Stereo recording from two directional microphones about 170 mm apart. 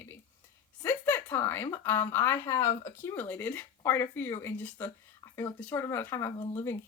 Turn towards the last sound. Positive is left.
turn(degrees=15)  # may be behind; listen again after turning